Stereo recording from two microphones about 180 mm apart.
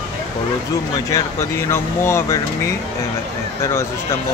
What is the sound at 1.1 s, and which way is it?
Speech, 15° left (ahead or behind).